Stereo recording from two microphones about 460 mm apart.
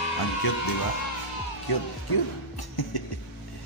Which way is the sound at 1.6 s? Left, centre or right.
Left.